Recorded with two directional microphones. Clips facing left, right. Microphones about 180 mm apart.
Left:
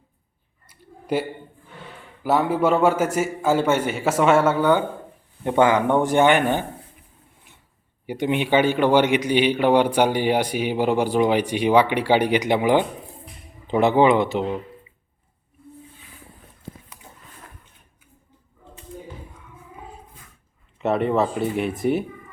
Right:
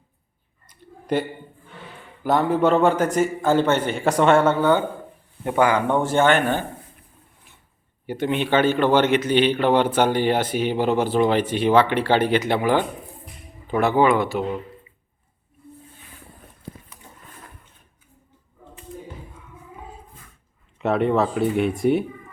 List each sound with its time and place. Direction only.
0.7 s a sound: 5° left (ahead or behind)
2.2 s a man's voice: 5° left (ahead or behind)
5.4 s a man's voice: 20° left (ahead or behind)
8.0 s a man's voice: 15° left (ahead or behind)
20.7 s speech: centre (ahead or behind)